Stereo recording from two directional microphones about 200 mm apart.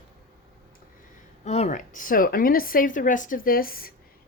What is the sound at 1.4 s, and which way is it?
A woman's voice, 35° left (ahead or behind).